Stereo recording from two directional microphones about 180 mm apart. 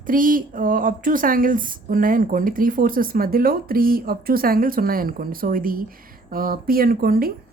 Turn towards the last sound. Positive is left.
turn(degrees=-55)  # may be behind; listen again after turning